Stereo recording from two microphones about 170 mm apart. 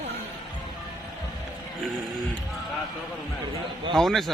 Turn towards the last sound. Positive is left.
turn(degrees=0)  # may be behind; listen again after turning